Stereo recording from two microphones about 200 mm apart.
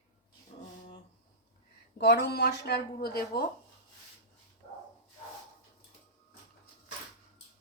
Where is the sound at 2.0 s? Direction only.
60° left (ahead or behind).